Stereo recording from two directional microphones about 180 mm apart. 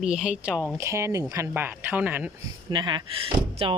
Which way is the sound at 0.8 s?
15° right (ahead or behind).